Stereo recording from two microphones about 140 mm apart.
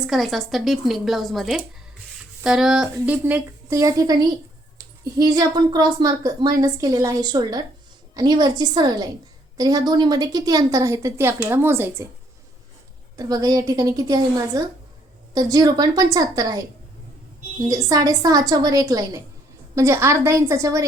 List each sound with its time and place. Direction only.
0.1 s a woman's voice: centre (ahead or behind); by 12.0 s 15° right (ahead or behind)
13.1 s a woman's voice: 25° right (ahead or behind)
17.7 s a woman's voice: 25° right (ahead or behind)